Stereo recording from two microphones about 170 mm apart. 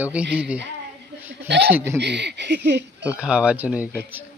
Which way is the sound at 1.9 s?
90° right.